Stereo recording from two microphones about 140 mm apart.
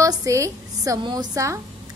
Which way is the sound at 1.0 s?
35° right (ahead or behind).